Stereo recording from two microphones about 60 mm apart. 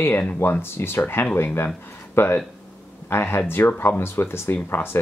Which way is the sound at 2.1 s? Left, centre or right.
Left.